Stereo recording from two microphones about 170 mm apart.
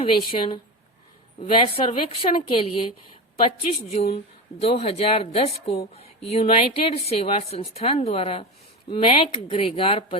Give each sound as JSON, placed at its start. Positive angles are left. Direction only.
{"t": 0.2, "sound": "a woman's voice", "side_deg": 30}